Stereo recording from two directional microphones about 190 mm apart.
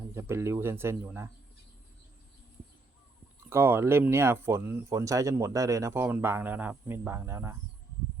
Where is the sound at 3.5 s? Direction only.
15° right (ahead or behind).